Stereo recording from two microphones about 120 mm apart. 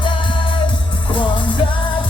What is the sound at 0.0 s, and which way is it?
Music, 45° left (ahead or behind).